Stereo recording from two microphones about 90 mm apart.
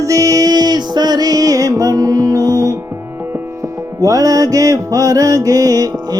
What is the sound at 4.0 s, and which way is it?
Music, 40° right (ahead or behind).